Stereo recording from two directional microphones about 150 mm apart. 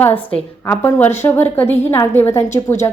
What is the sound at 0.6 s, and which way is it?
A woman's voice, 15° left (ahead or behind).